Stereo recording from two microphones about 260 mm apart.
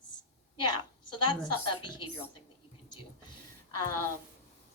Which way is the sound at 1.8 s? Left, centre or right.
Centre.